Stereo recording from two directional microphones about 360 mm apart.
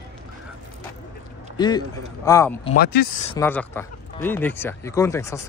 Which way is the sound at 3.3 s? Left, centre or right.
Centre.